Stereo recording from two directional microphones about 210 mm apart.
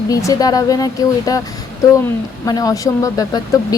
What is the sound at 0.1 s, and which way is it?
Speech, 15° left (ahead or behind).